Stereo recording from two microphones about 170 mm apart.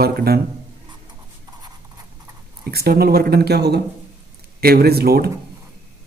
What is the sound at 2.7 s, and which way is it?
Speech, 65° right (ahead or behind).